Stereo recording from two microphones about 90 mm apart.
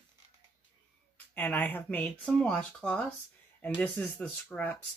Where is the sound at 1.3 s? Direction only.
20° left (ahead or behind).